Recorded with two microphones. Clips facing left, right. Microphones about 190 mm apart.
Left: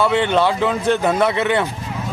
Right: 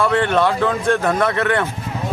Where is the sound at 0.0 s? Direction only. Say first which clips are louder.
Even; 5° left (ahead or behind).